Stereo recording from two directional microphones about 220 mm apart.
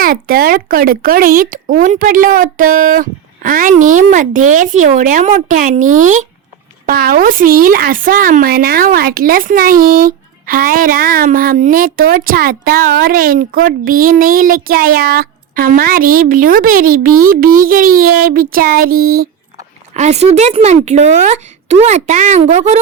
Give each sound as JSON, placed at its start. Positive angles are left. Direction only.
{"t": 0.0, "sound": "a woman's voice", "side_deg": -40}
{"t": 19.9, "sound": "a woman's voice", "side_deg": -30}